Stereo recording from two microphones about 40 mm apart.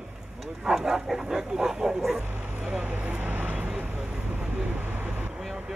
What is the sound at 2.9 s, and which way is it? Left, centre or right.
Vehicle, right.